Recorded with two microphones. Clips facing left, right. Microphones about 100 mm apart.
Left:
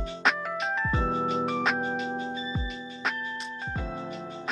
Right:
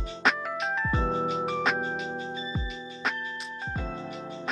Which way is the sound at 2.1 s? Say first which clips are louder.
Left 2 dB; 20° left (ahead or behind).